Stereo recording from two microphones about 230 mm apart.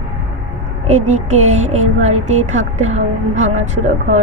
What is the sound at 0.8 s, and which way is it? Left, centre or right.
A woman's voice, right.